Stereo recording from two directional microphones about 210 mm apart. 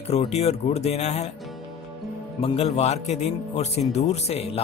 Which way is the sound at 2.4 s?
30° left (ahead or behind).